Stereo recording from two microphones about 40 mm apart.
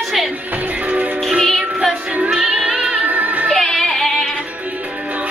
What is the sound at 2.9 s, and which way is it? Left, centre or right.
Music, right.